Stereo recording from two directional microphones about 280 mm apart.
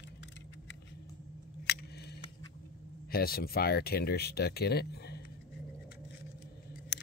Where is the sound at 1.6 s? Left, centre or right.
Left.